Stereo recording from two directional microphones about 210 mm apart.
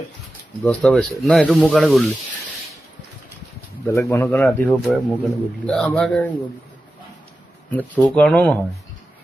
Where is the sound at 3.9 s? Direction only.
15° left (ahead or behind).